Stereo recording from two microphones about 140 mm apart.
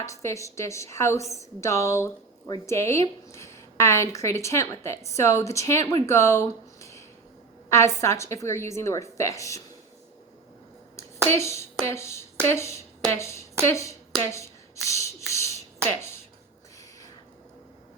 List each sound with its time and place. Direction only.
0.0 s a woman's voice: 20° left (ahead or behind)
11.3 s a woman's voice: 20° left (ahead or behind)
15.3 s a sound: 20° left (ahead or behind)
15.9 s speech: 20° left (ahead or behind)